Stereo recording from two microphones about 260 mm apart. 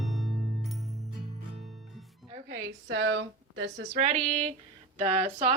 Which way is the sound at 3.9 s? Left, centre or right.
Right.